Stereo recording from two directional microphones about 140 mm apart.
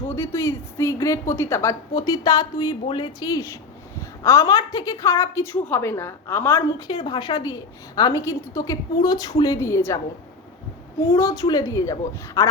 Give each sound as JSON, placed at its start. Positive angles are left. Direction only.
{"t": 0.2, "sound": "a woman's voice", "side_deg": 20}
{"t": 6.7, "sound": "a woman's voice", "side_deg": 30}
{"t": 11.1, "sound": "a woman's voice", "side_deg": 25}